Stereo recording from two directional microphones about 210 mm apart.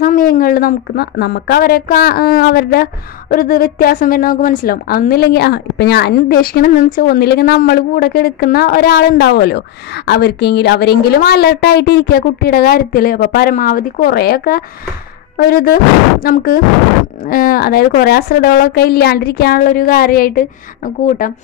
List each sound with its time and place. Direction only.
0.0 s a woman's voice: 40° left (ahead or behind)